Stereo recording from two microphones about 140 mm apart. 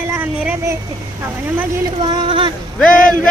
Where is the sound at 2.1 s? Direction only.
35° right (ahead or behind).